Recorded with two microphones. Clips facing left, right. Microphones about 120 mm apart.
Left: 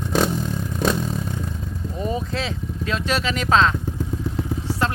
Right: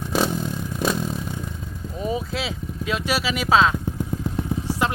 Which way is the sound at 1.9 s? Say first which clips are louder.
Even; 5° right (ahead or behind).